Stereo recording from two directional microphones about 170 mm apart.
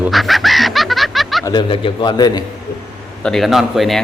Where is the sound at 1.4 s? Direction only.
30° left (ahead or behind).